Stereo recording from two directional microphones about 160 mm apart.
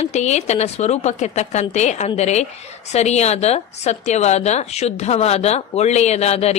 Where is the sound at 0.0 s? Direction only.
45° left (ahead or behind).